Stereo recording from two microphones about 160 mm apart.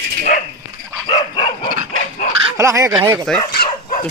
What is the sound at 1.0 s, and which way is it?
Dog, 30° left (ahead or behind).